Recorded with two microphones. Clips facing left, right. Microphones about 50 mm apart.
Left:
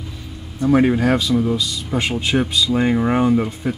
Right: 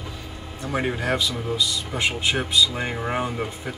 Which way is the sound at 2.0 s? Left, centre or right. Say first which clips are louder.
Left 3 dB; centre.